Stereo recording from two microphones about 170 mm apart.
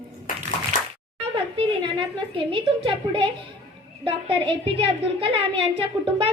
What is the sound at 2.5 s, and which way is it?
A woman's voice, 30° right (ahead or behind).